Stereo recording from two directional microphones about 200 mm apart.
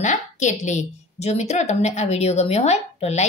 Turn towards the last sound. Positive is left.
turn(degrees=30)  # may be behind; listen again after turning